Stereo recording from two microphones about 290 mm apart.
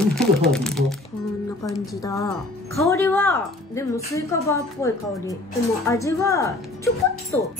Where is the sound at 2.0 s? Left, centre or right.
Centre.